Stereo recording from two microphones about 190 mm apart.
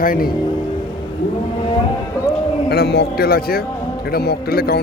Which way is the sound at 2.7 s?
60° left (ahead or behind).